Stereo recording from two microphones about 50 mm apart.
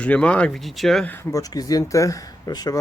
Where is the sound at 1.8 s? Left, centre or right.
Left.